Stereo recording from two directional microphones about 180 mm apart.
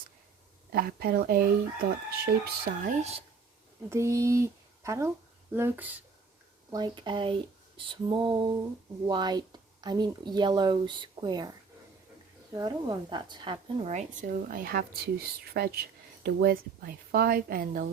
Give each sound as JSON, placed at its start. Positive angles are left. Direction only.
{"t": 0.7, "sound": "speech", "side_deg": -55}
{"t": 3.0, "sound": "speech", "side_deg": -35}
{"t": 3.8, "sound": "speech", "side_deg": -15}
{"t": 12.5, "sound": "speech", "side_deg": -20}